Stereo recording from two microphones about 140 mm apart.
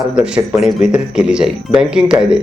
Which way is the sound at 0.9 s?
5° right (ahead or behind).